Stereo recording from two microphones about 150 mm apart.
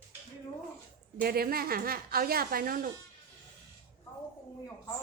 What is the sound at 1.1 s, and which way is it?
A woman's voice, 85° right.